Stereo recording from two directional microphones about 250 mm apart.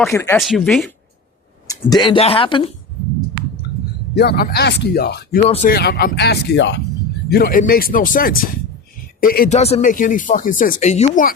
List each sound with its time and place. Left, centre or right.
0.1 s speech: centre
2.0 s speech: left
4.1 s speech: left